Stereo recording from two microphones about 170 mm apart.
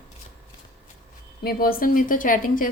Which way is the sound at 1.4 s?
60° left (ahead or behind).